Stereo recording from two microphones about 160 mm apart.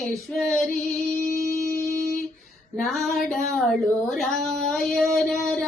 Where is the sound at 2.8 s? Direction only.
Centre (ahead or behind).